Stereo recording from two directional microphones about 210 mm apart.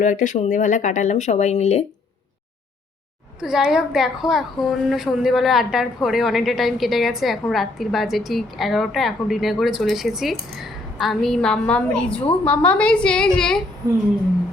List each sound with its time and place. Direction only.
0.0 s speech: 40° left (ahead or behind)
3.4 s a woman's voice: centre (ahead or behind)